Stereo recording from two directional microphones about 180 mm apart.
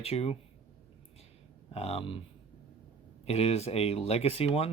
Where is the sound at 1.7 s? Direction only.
35° left (ahead or behind).